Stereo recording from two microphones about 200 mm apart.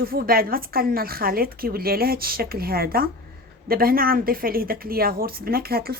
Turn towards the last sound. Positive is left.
turn(degrees=-50)  # may be behind; listen again after turning